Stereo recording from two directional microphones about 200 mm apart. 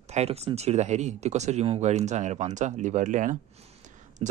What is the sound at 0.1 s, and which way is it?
Speech, 30° right (ahead or behind).